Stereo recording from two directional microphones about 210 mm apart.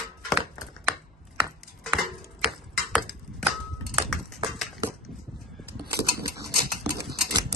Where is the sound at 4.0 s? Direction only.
Centre (ahead or behind).